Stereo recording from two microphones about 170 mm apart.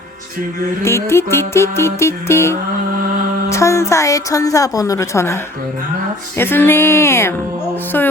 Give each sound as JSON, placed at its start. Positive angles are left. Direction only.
{"t": 0.8, "sound": "a woman's voice", "side_deg": 15}